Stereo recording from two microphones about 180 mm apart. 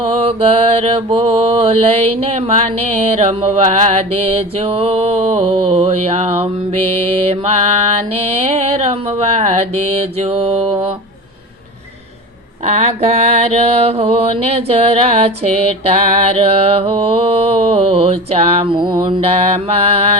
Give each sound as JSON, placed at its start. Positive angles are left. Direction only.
{"t": 0.2, "sound": "music", "side_deg": -35}
{"t": 12.6, "sound": "music", "side_deg": -35}